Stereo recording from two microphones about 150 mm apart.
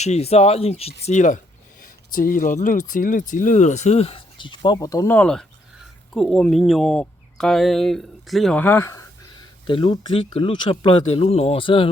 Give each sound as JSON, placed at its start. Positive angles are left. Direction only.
{"t": 0.0, "sound": "speech", "side_deg": 45}
{"t": 1.0, "sound": "speech", "side_deg": 55}
{"t": 1.8, "sound": "speech", "side_deg": 70}
{"t": 9.6, "sound": "speech", "side_deg": 35}